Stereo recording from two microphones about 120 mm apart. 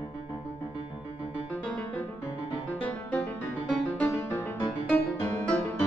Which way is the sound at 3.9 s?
20° left (ahead or behind).